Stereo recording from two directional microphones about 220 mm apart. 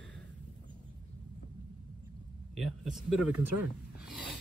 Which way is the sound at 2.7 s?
Centre (ahead or behind).